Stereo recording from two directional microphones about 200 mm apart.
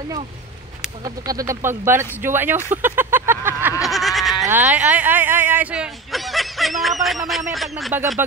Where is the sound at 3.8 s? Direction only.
Centre (ahead or behind).